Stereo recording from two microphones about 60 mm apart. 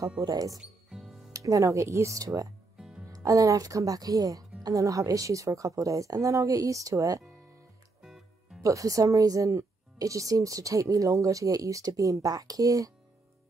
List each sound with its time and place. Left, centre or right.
0.3 s speech: right
0.6 s music: centre
1.3 s speech: right
2.8 s music: centre
3.1 s a woman's voice: right
8.0 s music: centre
8.6 s a woman's voice: right